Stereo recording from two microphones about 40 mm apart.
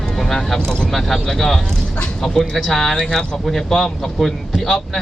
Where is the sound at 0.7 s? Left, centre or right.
Left.